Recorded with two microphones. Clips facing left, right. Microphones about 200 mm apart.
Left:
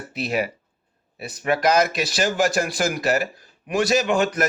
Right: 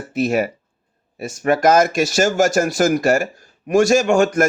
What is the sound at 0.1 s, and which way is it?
A man's voice, 45° right (ahead or behind).